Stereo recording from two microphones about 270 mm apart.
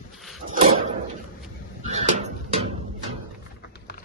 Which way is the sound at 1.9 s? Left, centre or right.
Right.